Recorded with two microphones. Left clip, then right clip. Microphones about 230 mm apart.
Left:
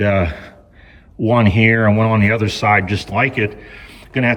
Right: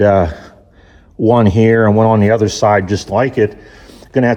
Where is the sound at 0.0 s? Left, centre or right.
Centre.